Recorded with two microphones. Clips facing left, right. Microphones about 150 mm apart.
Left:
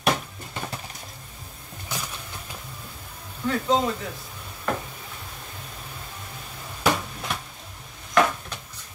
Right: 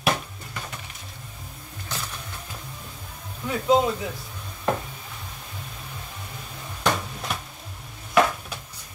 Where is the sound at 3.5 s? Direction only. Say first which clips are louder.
Right 2 dB; 10° right (ahead or behind).